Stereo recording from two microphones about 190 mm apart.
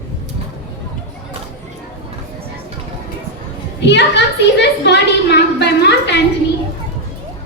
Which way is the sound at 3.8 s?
65° left (ahead or behind).